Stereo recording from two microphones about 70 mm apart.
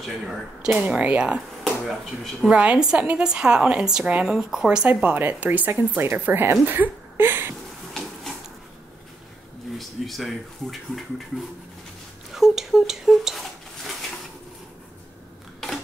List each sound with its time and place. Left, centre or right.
0.7 s a woman's voice: centre
1.6 s speech: centre
2.4 s a woman's voice: centre; by 7.5 s right
9.8 s speech: centre
12.3 s a sound: centre